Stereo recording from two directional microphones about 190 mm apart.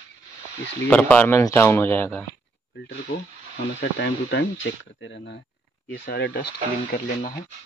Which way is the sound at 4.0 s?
75° left (ahead or behind).